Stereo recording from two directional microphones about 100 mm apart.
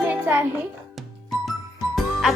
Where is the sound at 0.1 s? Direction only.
20° right (ahead or behind).